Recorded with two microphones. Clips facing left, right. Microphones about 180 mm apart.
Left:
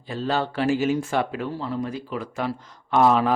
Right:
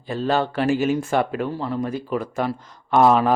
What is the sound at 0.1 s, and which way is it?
Speech, 55° right (ahead or behind).